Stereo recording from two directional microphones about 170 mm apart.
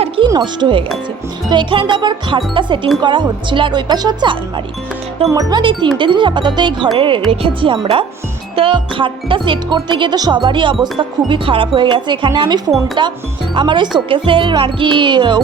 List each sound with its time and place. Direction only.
0.3 s speech: 25° right (ahead or behind)